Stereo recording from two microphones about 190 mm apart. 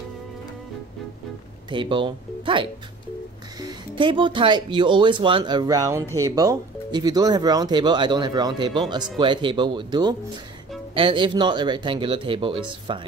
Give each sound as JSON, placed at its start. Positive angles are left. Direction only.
{"t": 1.7, "sound": "speech", "side_deg": -25}